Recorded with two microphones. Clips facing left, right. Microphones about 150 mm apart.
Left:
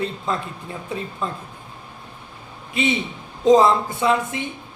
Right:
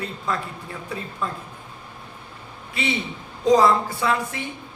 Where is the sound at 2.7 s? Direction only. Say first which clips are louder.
Left 4 dB; 20° left (ahead or behind).